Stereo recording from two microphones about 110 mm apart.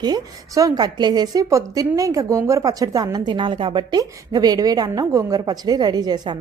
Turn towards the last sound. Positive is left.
turn(degrees=-40)  # may be behind; listen again after turning